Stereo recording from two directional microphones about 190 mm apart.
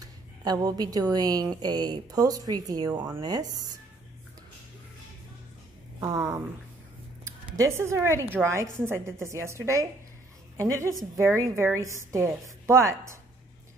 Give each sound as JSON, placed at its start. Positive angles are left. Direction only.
{"t": 0.0, "sound": "a woman's voice", "side_deg": -20}
{"t": 5.9, "sound": "a woman's voice", "side_deg": -20}